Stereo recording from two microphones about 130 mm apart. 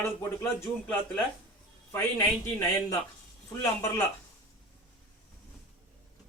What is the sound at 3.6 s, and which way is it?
Speech, 20° left (ahead or behind).